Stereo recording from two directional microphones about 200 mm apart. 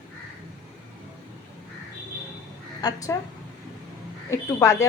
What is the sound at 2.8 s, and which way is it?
Speech, 20° left (ahead or behind).